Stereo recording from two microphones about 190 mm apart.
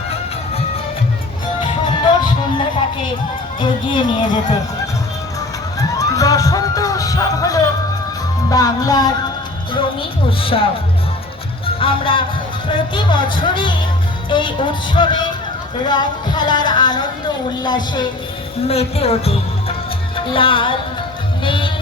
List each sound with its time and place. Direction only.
3.6 s speech: 25° left (ahead or behind)
6.0 s music: 15° left (ahead or behind)
8.4 s speech: 20° left (ahead or behind)
11.6 s music: 30° left (ahead or behind)
12.7 s speech: 25° left (ahead or behind)
20.1 s music: 25° left (ahead or behind)
21.4 s speech: 25° left (ahead or behind)